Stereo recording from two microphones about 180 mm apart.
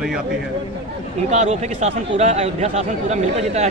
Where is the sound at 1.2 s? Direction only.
40° right (ahead or behind).